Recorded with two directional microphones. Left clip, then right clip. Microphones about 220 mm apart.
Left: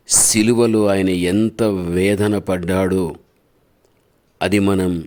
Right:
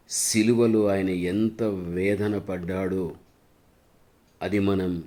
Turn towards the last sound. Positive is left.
turn(degrees=40)  # may be behind; listen again after turning